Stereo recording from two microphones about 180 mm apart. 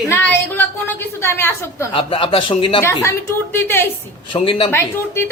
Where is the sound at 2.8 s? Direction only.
15° left (ahead or behind).